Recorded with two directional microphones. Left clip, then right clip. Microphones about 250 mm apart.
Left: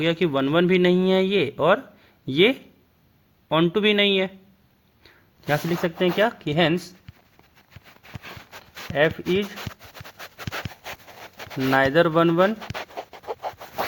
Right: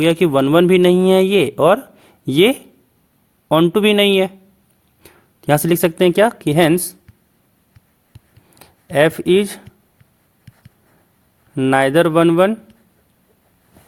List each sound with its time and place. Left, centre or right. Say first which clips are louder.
0.0 s speech: right 8 dB; right
8.9 s speech: right 8 dB; right
11.7 s speech: right 5 dB; centre